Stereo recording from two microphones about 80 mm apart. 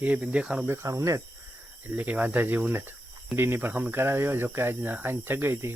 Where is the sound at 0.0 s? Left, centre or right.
Centre.